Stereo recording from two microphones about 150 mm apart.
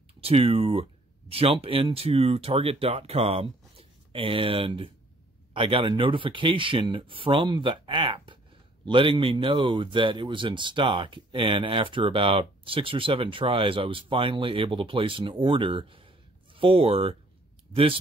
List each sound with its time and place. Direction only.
0.2 s speech: 40° right (ahead or behind)